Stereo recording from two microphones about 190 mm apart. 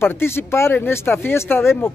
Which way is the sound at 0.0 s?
10° left (ahead or behind).